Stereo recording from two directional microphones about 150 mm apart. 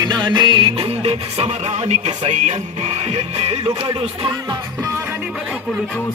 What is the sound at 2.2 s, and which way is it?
Speech, 50° right (ahead or behind).